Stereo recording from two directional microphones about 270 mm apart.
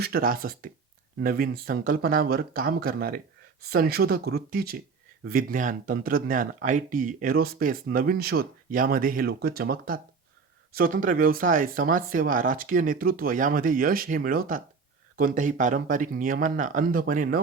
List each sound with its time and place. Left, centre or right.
0.0 s speech: right